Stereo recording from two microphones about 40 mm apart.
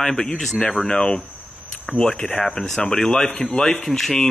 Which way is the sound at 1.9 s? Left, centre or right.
Left.